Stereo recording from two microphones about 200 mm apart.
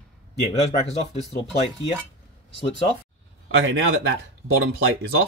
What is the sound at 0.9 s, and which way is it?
Speech, 35° left (ahead or behind).